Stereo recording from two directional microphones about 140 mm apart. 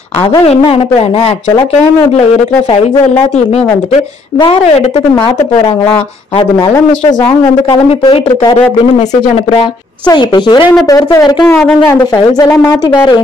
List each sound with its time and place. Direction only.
0.3 s speech: 30° left (ahead or behind)
4.4 s a woman's voice: 40° left (ahead or behind)
7.7 s a woman's voice: 35° left (ahead or behind)
10.0 s a woman's voice: 35° left (ahead or behind)
11.4 s speech: 5° left (ahead or behind)
12.4 s a woman's voice: 25° left (ahead or behind)